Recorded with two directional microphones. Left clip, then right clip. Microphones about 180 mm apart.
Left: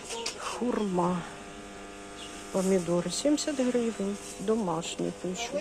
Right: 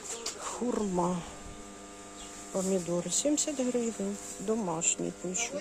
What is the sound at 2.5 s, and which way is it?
Speech, 15° right (ahead or behind).